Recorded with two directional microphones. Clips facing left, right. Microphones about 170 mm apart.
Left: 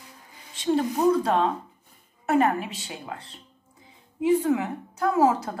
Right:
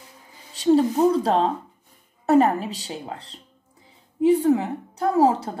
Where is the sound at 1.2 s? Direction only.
30° right (ahead or behind).